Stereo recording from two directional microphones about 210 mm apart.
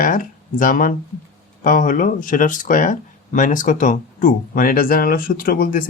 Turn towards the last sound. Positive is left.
turn(degrees=45)  # may be behind; listen again after turning